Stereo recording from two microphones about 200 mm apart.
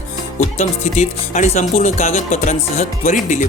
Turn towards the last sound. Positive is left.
turn(degrees=35)  # may be behind; listen again after turning